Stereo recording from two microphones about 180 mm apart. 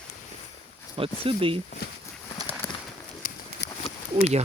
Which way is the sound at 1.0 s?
30° right (ahead or behind).